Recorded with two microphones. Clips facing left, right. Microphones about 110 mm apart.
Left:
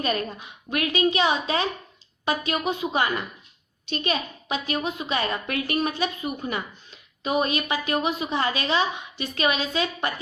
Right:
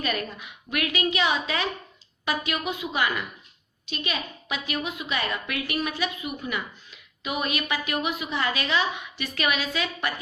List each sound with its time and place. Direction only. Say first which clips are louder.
0.0 s a woman's voice: left 3 dB; 30° left (ahead or behind)